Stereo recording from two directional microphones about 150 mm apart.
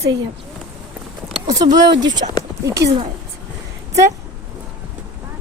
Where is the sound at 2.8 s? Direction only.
90° right.